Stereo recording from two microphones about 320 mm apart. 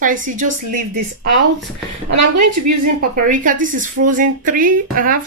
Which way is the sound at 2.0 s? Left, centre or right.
Right.